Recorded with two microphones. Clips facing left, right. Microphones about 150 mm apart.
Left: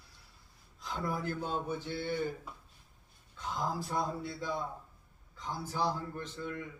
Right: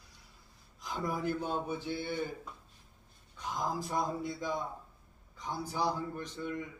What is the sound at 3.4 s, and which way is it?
Speech, 15° right (ahead or behind).